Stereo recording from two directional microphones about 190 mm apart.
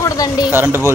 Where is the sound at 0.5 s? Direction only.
10° right (ahead or behind).